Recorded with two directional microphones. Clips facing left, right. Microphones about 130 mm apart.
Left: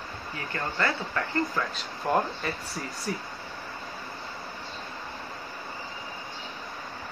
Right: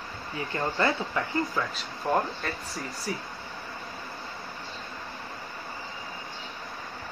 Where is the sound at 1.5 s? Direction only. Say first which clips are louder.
Even; centre (ahead or behind).